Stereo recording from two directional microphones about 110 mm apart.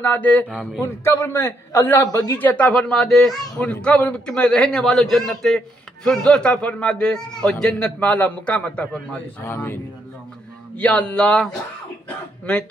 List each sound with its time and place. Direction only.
0.0 s a man's voice: 15° left (ahead or behind)
0.8 s a man's voice: 25° left (ahead or behind)
10.8 s a man's voice: 10° left (ahead or behind)